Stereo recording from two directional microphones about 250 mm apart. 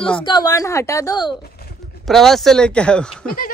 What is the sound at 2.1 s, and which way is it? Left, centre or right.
Speech, centre.